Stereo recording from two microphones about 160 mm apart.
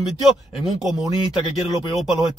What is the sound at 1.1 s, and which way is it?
Speech, 30° left (ahead or behind).